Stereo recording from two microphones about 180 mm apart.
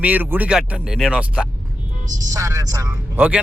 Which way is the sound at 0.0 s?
10° right (ahead or behind).